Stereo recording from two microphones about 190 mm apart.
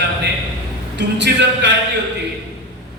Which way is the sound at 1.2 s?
65° right (ahead or behind).